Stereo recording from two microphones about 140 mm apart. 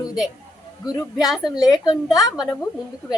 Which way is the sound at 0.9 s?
30° left (ahead or behind).